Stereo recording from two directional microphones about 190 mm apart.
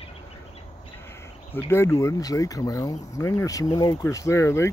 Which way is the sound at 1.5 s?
15° left (ahead or behind).